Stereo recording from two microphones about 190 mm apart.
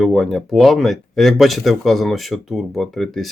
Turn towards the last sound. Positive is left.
turn(degrees=0)  # may be behind; listen again after turning